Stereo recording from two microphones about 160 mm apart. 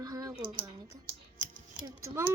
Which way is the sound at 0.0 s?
25° right (ahead or behind).